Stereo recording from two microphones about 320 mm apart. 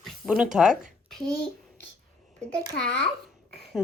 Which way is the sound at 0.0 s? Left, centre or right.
Centre.